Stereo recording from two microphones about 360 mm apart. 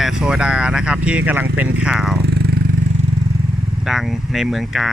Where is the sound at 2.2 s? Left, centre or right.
Right.